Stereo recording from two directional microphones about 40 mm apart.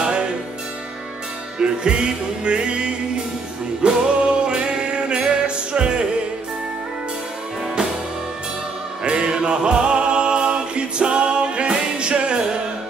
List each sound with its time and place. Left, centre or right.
1.6 s music: right
9.0 s music: right